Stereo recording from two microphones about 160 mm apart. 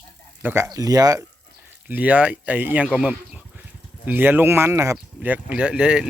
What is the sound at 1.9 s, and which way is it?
Speech, 10° right (ahead or behind).